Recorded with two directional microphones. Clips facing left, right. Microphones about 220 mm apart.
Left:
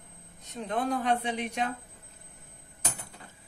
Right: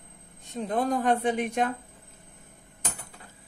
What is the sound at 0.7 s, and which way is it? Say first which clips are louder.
A woman's voice: right 3 dB; 45° right (ahead or behind).